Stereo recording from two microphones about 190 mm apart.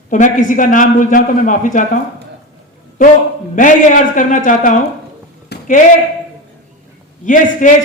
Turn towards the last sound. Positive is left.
turn(degrees=45)  # may be behind; listen again after turning